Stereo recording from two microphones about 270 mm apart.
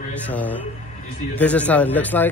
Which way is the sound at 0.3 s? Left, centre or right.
Centre.